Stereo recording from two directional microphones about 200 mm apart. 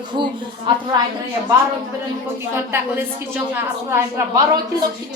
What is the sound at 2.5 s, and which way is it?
A woman's voice, 10° right (ahead or behind).